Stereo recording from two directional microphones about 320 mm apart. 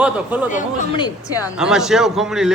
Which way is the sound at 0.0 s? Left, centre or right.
Centre.